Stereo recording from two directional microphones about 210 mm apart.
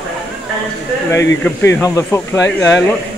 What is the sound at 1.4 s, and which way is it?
Speech, 10° left (ahead or behind).